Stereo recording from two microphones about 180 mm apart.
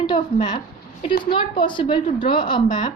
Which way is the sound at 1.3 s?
25° left (ahead or behind).